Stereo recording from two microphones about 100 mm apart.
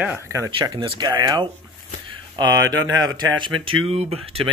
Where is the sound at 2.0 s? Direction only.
50° right (ahead or behind).